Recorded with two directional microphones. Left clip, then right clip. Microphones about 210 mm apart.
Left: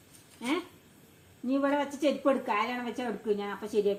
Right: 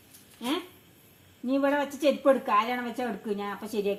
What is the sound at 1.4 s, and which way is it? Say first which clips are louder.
A woman's voice: right 2 dB; 30° right (ahead or behind).